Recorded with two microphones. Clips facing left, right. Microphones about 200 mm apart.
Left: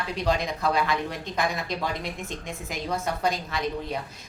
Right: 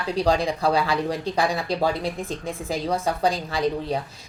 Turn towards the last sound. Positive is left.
turn(degrees=-30)  # may be behind; listen again after turning